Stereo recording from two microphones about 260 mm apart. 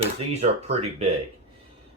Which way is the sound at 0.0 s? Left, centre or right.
Right.